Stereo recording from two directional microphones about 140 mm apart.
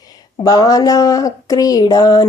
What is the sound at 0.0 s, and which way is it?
Speech, 25° left (ahead or behind).